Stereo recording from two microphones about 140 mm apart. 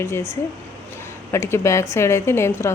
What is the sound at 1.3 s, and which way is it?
Speech, 20° left (ahead or behind).